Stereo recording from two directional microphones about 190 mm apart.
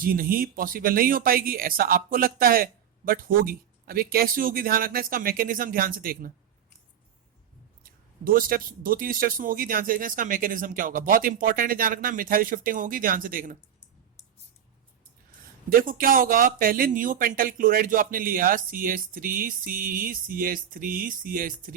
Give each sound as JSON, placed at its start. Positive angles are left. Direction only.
{"t": 0.0, "sound": "speech", "side_deg": -50}
{"t": 7.9, "sound": "speech", "side_deg": -50}
{"t": 15.7, "sound": "speech", "side_deg": -50}